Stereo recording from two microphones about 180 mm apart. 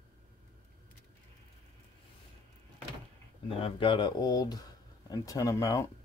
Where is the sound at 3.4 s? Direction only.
30° left (ahead or behind).